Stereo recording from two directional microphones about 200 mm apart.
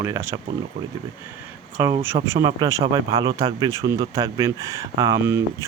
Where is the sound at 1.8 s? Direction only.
15° right (ahead or behind).